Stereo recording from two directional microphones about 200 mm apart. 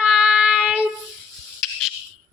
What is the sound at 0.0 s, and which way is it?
Child singing, 5° right (ahead or behind).